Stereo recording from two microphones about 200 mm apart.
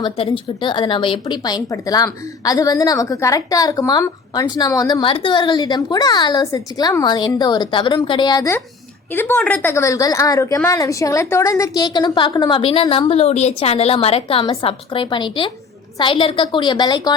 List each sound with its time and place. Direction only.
0.0 s speech: 25° left (ahead or behind)